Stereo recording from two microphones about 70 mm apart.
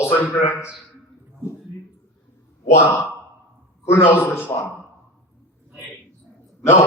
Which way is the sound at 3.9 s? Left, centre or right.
Left.